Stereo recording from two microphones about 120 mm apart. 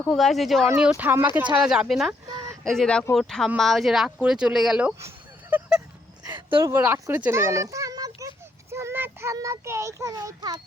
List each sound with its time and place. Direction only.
0.1 s speech: centre (ahead or behind)
0.8 s speech: 10° right (ahead or behind)
4.9 s a sound: 20° right (ahead or behind)
6.8 s speech: 15° right (ahead or behind)
8.7 s child singing: 20° right (ahead or behind)
9.3 s a child's voice: 25° right (ahead or behind)